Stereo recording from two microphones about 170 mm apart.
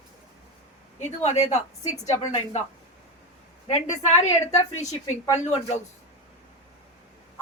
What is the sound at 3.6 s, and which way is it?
A woman's voice, 40° left (ahead or behind).